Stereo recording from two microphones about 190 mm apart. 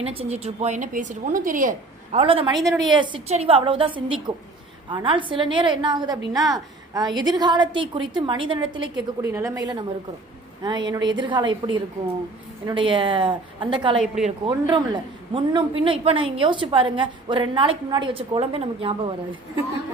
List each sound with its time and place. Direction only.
0.0 s a woman's voice: 30° right (ahead or behind)
2.1 s a woman's voice: 30° right (ahead or behind)
2.6 s a woman's voice: centre (ahead or behind)
2.9 s a woman's voice: 30° right (ahead or behind)
9.2 s a woman's voice: 15° right (ahead or behind)
13.9 s a woman's voice: 5° right (ahead or behind)
14.3 s a woman's voice: 25° right (ahead or behind)